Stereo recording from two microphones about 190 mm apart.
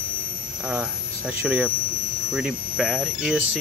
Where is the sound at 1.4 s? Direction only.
5° right (ahead or behind).